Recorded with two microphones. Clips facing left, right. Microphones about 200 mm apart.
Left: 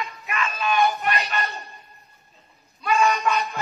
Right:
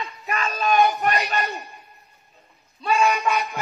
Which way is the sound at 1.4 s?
15° right (ahead or behind).